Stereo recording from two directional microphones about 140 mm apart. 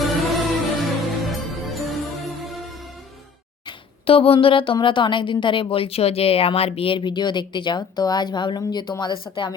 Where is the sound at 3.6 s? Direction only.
40° left (ahead or behind).